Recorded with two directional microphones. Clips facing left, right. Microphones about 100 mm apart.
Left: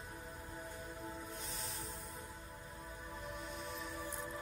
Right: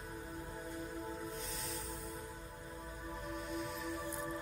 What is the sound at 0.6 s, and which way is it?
Music, centre (ahead or behind).